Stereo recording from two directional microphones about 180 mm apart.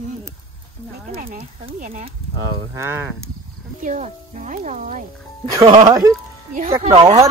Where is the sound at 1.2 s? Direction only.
50° right (ahead or behind).